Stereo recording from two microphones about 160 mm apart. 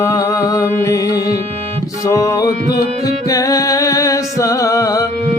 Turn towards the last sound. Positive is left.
turn(degrees=20)  # may be behind; listen again after turning